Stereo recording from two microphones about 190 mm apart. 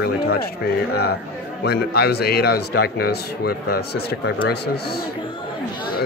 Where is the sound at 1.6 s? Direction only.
60° left (ahead or behind).